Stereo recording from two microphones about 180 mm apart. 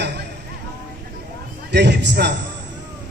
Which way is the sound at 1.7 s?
75° right (ahead or behind).